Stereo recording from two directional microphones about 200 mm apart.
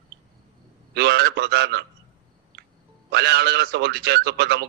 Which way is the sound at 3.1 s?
55° right (ahead or behind).